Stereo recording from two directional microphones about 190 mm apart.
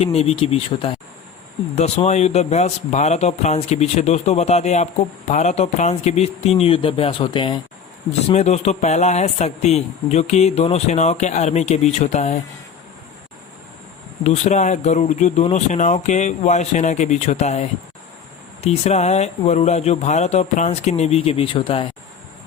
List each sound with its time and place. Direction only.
0.0 s speech: 30° left (ahead or behind)
14.3 s speech: 35° left (ahead or behind)